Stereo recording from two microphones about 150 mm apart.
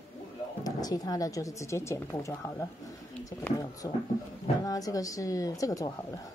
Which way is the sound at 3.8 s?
25° left (ahead or behind).